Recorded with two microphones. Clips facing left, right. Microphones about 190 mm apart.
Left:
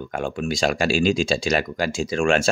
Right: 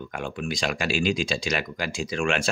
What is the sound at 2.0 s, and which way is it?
Speech, 45° left (ahead or behind).